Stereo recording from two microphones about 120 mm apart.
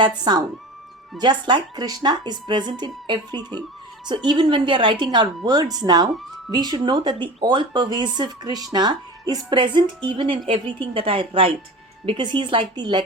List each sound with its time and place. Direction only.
1.2 s a woman's voice: 40° right (ahead or behind)